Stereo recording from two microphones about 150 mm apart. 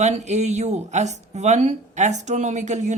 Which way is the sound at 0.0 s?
50° right (ahead or behind).